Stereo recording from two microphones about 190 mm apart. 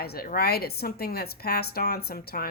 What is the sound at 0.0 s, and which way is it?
A woman's voice, 55° left (ahead or behind).